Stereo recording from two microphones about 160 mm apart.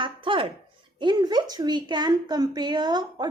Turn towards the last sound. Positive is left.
turn(degrees=-25)  # may be behind; listen again after turning